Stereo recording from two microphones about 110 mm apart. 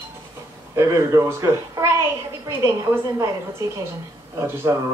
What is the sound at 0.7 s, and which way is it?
Speech, 25° right (ahead or behind).